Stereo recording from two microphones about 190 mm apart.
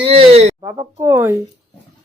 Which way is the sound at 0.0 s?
30° right (ahead or behind).